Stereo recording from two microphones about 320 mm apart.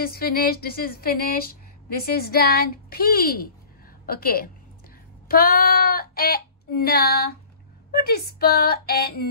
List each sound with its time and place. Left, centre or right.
0.0 s a woman's voice: left
5.3 s child singing: left
7.9 s a woman's voice: left